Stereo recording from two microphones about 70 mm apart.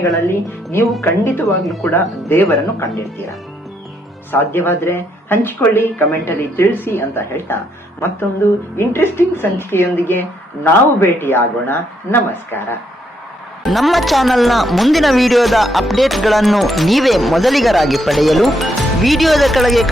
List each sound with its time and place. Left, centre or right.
0.3 s speech: left
4.3 s speech: left
8.7 s speech: left
13.7 s speech: centre